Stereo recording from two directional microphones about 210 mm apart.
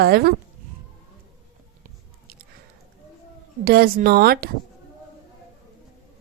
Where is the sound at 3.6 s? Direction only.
45° right (ahead or behind).